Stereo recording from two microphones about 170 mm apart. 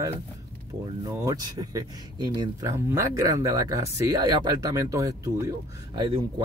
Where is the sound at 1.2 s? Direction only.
20° right (ahead or behind).